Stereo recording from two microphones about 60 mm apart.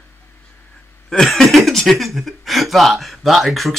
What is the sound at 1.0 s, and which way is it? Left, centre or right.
Speech, centre.